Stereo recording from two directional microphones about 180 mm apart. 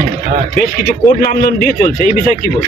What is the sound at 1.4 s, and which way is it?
Speech, 55° left (ahead or behind).